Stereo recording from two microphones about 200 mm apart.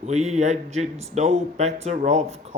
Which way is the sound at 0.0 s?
35° right (ahead or behind).